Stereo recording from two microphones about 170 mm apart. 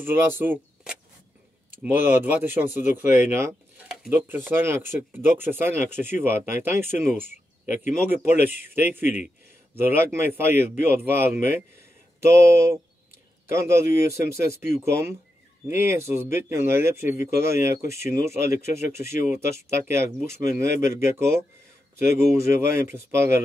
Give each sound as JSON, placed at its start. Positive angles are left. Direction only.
{"t": 0.0, "sound": "speech", "side_deg": -15}
{"t": 22.5, "sound": "speech", "side_deg": -15}